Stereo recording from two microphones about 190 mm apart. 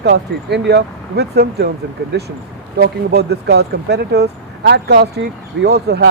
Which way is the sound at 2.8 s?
55° right (ahead or behind).